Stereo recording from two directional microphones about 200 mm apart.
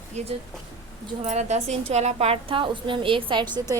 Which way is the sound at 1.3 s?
35° right (ahead or behind).